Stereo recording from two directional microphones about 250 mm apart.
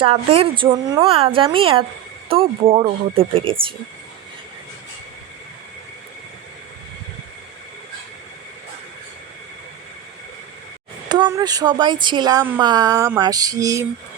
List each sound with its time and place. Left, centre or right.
0.0 s a woman's voice: right
11.1 s speech: centre